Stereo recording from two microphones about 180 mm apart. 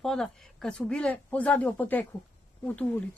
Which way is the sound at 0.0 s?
5° left (ahead or behind).